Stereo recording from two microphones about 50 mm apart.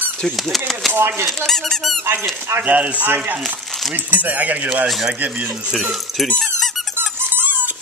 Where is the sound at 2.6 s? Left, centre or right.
Right.